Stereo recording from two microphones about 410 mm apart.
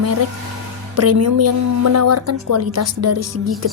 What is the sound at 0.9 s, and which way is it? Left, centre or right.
A woman's voice, right.